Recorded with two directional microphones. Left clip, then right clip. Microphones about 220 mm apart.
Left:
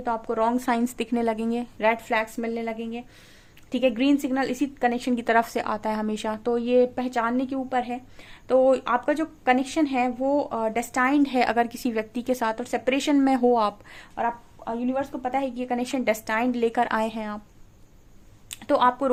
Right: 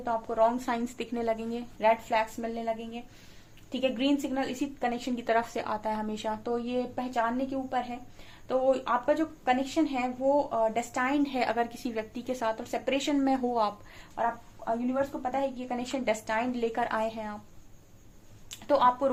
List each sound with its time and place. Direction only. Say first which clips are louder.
0.0 s speech: left 2 dB; 50° left (ahead or behind)
18.5 s speech: left 3 dB; 50° left (ahead or behind)